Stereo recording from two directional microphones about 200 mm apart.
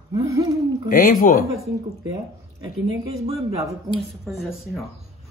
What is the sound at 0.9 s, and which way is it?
Speech, 40° left (ahead or behind).